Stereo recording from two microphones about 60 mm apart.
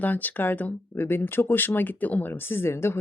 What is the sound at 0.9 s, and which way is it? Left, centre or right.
Speech, left.